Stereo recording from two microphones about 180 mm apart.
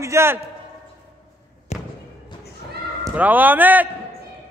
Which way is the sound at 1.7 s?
40° left (ahead or behind).